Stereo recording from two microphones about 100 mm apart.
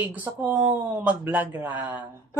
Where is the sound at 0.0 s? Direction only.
15° right (ahead or behind).